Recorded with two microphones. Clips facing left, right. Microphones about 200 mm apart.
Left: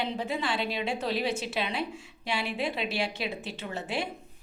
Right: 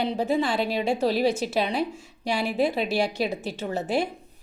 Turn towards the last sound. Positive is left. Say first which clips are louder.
# right 7 dB
turn(degrees=-40)  # may be behind; listen again after turning